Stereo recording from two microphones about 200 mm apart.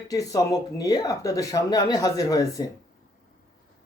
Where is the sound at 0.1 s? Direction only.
15° left (ahead or behind).